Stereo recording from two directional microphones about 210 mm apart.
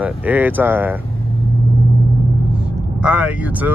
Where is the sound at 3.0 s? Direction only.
5° right (ahead or behind).